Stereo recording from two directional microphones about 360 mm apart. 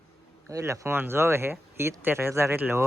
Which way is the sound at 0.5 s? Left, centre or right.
Centre.